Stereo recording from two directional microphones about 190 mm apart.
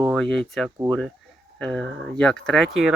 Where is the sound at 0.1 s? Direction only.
5° left (ahead or behind).